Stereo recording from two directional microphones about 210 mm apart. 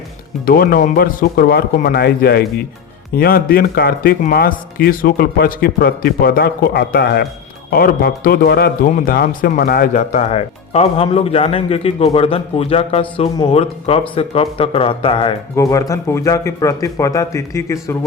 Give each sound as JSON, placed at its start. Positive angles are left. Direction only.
{"t": 0.4, "sound": "a man's voice", "side_deg": 45}
{"t": 15.5, "sound": "speech", "side_deg": 15}